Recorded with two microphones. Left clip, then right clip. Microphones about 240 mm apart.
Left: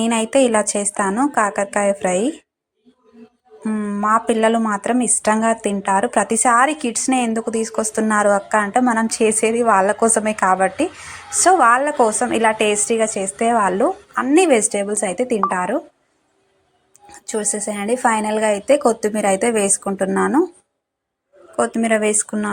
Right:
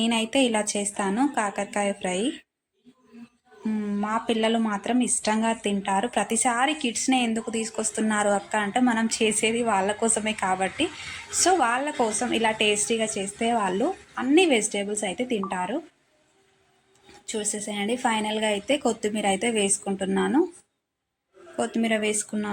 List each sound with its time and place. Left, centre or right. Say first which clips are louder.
0.0 s a woman's voice: left 7 dB; centre
3.6 s a woman's voice: left 8 dB; centre
17.1 s a woman's voice: left 8 dB; centre
21.5 s a woman's voice: left 8 dB; centre